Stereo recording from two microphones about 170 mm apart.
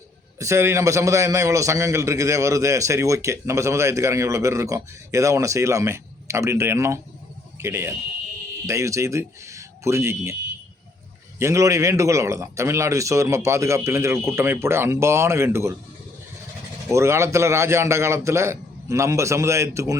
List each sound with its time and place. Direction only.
0.3 s a man's voice: 15° right (ahead or behind)
11.3 s a man's voice: 15° right (ahead or behind)
16.9 s a man's voice: 15° right (ahead or behind)